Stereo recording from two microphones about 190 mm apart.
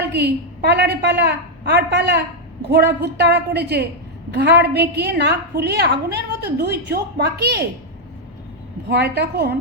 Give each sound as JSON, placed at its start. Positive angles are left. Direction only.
{"t": 0.0, "sound": "a woman's voice", "side_deg": -60}
{"t": 8.9, "sound": "a woman's voice", "side_deg": -60}